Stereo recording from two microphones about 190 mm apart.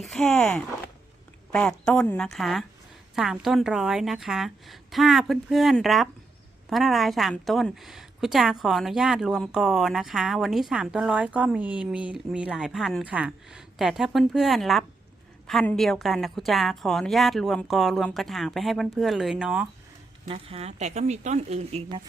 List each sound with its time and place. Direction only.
0.0 s a woman's voice: 5° left (ahead or behind)
20.2 s speech: 30° right (ahead or behind)